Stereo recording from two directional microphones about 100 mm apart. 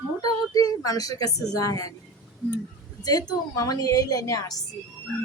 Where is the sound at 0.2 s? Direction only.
40° left (ahead or behind).